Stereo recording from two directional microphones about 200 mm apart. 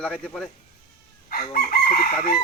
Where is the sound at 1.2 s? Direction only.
45° left (ahead or behind).